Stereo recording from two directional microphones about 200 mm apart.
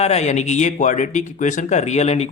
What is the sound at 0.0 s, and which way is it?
Speech, 35° left (ahead or behind).